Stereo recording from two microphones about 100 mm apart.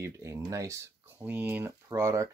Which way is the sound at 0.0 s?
30° right (ahead or behind).